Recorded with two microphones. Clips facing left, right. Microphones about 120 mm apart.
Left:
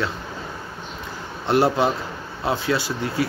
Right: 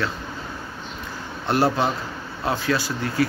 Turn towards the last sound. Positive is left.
turn(degrees=25)  # may be behind; listen again after turning